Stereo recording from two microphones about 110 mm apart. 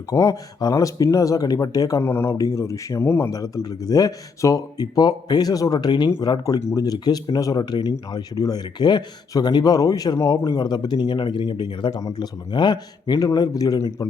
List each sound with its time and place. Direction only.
0.1 s speech: 30° left (ahead or behind)
2.0 s speech: 20° left (ahead or behind); by 6.4 s 45° left (ahead or behind)
6.4 s speech: 30° left (ahead or behind)